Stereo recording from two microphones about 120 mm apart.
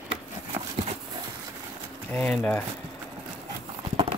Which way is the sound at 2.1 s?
10° left (ahead or behind).